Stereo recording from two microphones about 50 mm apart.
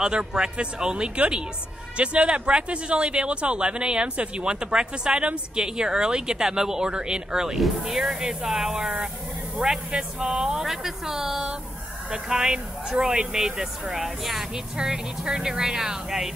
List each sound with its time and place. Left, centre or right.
0.0 s speech: centre